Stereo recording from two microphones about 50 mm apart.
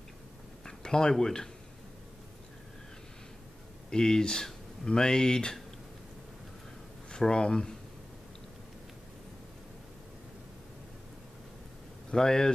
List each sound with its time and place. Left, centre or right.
0.7 s speech: centre
3.9 s speech: centre
7.1 s speech: centre
12.1 s speech: centre